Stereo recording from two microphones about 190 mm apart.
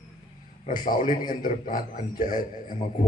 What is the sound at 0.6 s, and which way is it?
A man's voice, 45° left (ahead or behind).